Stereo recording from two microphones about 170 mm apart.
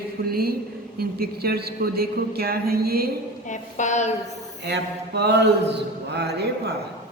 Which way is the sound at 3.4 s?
45° left (ahead or behind).